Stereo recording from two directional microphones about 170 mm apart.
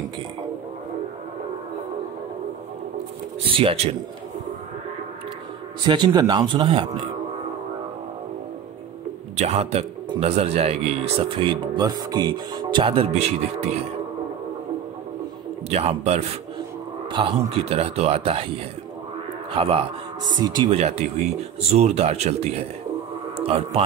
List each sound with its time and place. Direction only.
3.5 s speech: 35° right (ahead or behind)
5.9 s speech: 25° right (ahead or behind)
9.4 s speech: 40° right (ahead or behind)
15.7 s speech: 40° right (ahead or behind)
19.5 s a man's voice: 35° right (ahead or behind)